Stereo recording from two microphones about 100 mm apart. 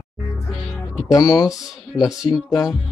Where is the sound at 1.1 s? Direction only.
35° left (ahead or behind).